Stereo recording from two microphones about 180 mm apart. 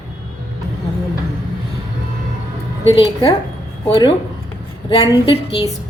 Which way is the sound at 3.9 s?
25° left (ahead or behind).